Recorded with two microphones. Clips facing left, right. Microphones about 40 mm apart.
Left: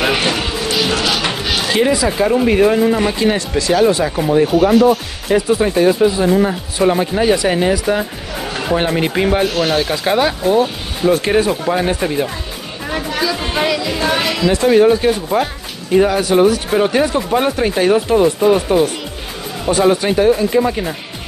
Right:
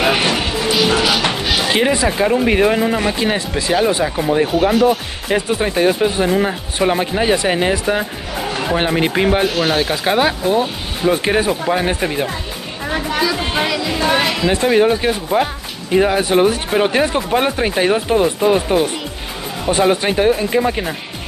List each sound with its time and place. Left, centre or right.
0.0 s music: centre
1.5 s music: right
2.0 s speech: centre
4.0 s speech: centre
5.3 s speech: right
16.2 s speech: right